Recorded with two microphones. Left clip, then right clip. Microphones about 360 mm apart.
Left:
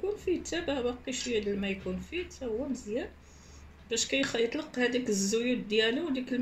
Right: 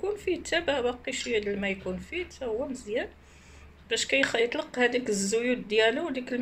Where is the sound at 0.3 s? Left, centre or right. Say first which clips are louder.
Right 6 dB; right.